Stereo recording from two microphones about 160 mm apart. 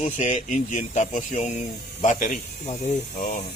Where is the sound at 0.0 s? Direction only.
50° left (ahead or behind).